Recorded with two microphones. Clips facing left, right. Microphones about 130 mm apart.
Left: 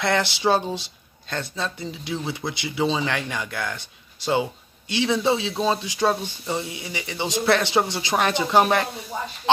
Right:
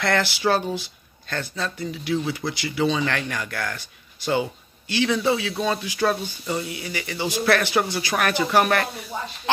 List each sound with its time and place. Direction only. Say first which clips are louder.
0.0 s speech: even; 20° left (ahead or behind)